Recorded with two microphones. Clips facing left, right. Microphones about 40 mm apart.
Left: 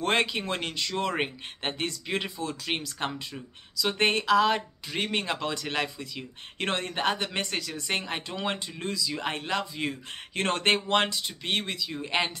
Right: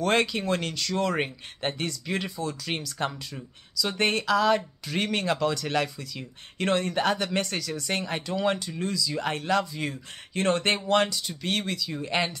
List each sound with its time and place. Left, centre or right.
0.0 s speech: left
4.8 s speech: centre
10.3 s speech: left; by 12.3 s centre